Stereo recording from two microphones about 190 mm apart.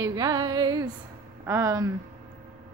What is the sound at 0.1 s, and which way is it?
Music, 20° right (ahead or behind).